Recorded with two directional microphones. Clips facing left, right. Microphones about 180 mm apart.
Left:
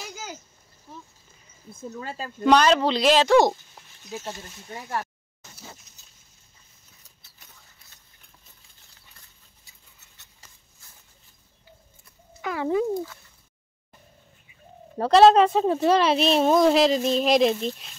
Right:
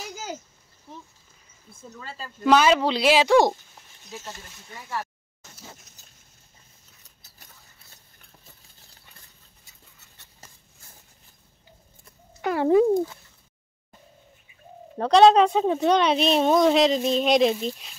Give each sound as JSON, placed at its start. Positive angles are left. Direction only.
{"t": 2.4, "sound": "speech", "side_deg": -5}
{"t": 4.1, "sound": "speech", "side_deg": 25}
{"t": 12.4, "sound": "a sound", "side_deg": -45}
{"t": 15.0, "sound": "a woman's voice", "side_deg": 5}